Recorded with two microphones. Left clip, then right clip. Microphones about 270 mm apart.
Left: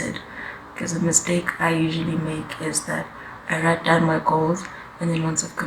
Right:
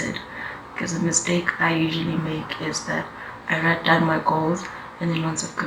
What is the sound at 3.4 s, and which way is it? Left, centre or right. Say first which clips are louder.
Speech: even; left.